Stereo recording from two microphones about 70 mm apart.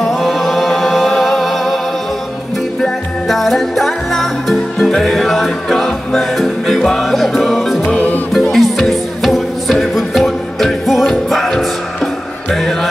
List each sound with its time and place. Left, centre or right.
0.0 s music: centre
2.8 s music: centre
7.8 s music: left
8.3 s music: centre